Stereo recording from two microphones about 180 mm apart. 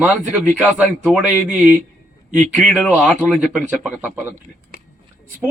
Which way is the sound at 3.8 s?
5° right (ahead or behind).